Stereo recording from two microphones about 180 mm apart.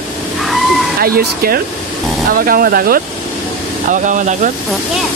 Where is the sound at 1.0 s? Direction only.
55° right (ahead or behind).